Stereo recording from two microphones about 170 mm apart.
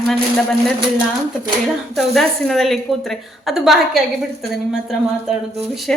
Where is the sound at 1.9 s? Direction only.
Centre (ahead or behind).